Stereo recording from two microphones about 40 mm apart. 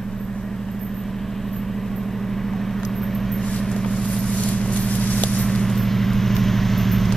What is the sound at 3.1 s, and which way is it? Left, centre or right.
Vehicle, centre.